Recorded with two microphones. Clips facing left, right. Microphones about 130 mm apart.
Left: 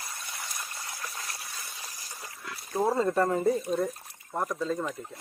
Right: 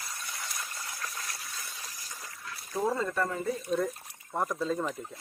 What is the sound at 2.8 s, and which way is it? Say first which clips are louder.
Speech: left 5 dB; 35° left (ahead or behind).